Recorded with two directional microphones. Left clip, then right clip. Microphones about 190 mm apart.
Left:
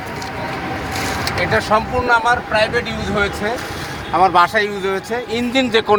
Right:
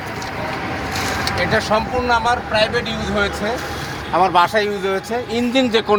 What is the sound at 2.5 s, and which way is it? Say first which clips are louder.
Speech: left 1 dB; 10° right (ahead or behind).